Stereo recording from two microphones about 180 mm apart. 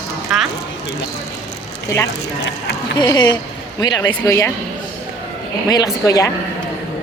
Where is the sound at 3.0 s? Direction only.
25° left (ahead or behind).